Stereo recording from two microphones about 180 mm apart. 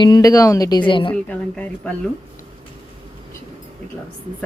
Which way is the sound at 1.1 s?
5° left (ahead or behind).